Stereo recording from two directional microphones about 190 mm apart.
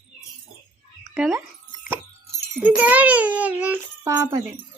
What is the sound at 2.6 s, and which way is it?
A child's voice, 5° right (ahead or behind).